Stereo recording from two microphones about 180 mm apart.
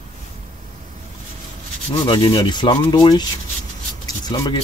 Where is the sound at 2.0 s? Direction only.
25° left (ahead or behind).